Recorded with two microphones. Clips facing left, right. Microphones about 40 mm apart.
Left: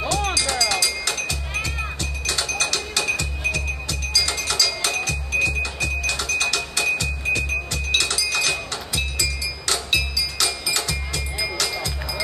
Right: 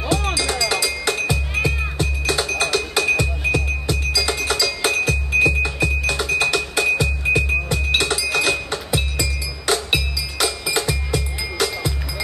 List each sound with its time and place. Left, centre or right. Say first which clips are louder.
0.1 s music: right 4 dB; centre